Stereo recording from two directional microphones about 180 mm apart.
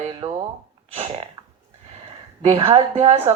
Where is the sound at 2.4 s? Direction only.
35° right (ahead or behind).